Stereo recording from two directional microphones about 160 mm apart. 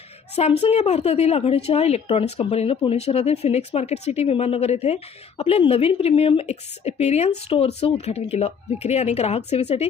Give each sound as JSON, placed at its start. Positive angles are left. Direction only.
{"t": 0.3, "sound": "speech", "side_deg": 40}